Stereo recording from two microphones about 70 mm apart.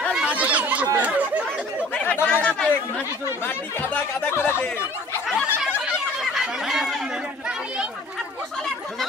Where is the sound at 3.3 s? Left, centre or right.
Left.